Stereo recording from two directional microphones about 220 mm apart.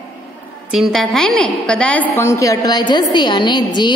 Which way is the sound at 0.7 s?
Centre (ahead or behind).